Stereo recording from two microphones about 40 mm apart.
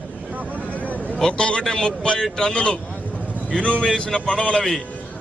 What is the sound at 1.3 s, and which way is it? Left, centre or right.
A man's voice, left.